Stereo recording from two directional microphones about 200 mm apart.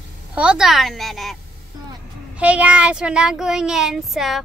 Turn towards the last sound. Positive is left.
turn(degrees=0)  # may be behind; listen again after turning